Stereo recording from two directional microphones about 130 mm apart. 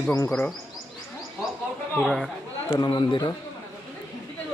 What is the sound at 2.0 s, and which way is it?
Speech, centre (ahead or behind).